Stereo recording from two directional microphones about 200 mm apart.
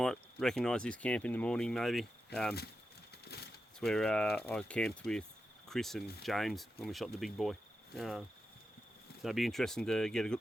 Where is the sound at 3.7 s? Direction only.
5° left (ahead or behind).